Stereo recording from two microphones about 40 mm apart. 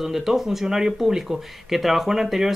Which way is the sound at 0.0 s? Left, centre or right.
Centre.